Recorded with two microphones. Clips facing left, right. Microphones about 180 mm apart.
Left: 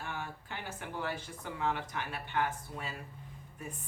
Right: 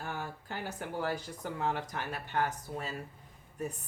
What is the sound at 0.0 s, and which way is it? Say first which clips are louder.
Speech: right 2 dB; 40° right (ahead or behind).